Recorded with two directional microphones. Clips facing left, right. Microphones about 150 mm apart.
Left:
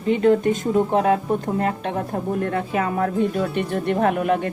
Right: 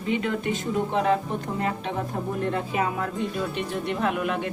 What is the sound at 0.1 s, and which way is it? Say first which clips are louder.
Speech: left 9 dB; 40° left (ahead or behind).